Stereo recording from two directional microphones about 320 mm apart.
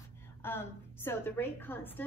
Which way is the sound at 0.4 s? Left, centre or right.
Centre.